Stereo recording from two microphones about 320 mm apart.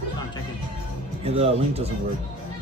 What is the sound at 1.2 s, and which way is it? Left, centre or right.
Speech, centre.